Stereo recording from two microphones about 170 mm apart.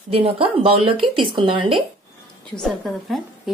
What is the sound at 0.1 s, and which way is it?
Speech, 35° right (ahead or behind).